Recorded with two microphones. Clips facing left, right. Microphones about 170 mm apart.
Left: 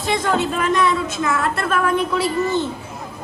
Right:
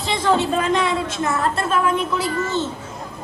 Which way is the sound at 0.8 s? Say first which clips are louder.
Left 2 dB; 25° right (ahead or behind).